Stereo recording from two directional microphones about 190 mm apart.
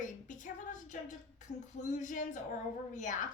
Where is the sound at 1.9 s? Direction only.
40° left (ahead or behind).